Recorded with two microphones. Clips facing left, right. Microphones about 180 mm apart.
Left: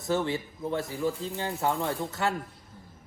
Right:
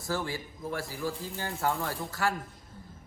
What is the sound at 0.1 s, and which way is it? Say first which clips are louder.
Speech: left 5 dB; 20° left (ahead or behind).